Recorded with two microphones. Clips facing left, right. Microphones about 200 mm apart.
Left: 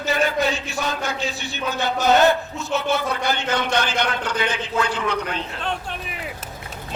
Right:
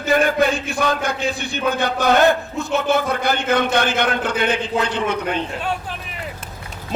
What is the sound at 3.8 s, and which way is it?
Speech, 55° right (ahead or behind).